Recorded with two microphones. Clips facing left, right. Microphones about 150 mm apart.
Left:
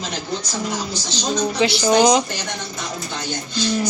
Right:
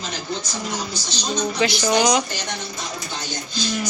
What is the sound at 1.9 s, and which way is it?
Child singing, 25° left (ahead or behind).